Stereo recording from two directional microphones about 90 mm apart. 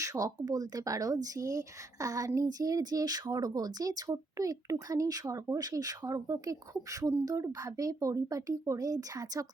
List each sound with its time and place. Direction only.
0.0 s speech: 40° right (ahead or behind)